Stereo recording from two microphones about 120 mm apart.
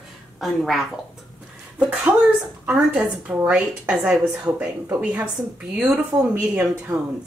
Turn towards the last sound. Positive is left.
turn(degrees=-5)  # may be behind; listen again after turning